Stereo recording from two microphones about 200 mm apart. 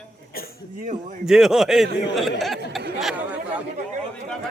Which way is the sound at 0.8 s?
40° right (ahead or behind).